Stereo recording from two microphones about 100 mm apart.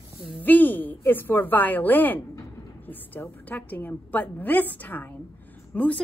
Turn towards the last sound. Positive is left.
turn(degrees=10)  # may be behind; listen again after turning